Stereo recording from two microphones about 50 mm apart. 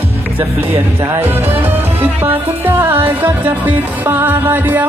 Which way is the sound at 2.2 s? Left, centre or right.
Right.